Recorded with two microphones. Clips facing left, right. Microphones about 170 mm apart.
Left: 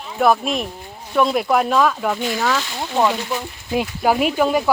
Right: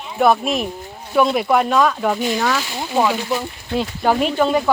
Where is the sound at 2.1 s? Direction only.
20° right (ahead or behind).